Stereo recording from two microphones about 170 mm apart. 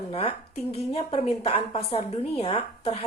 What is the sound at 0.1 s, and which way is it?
A woman's voice, 35° left (ahead or behind).